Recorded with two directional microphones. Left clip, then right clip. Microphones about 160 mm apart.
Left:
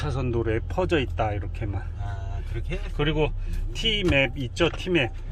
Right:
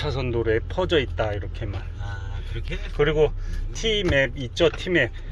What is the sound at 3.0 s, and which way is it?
Speech, 10° left (ahead or behind).